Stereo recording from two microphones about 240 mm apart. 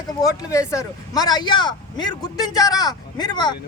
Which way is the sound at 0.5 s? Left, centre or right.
Centre.